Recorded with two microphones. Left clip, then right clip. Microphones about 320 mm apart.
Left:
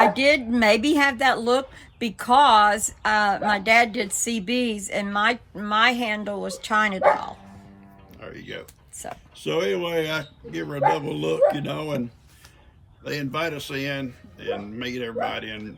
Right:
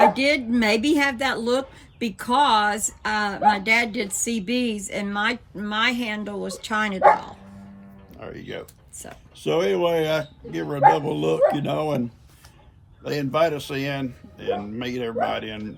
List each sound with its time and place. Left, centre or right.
0.0 s speech: centre
8.2 s speech: centre
13.1 s speech: centre